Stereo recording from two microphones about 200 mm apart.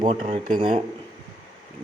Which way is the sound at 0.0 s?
25° right (ahead or behind).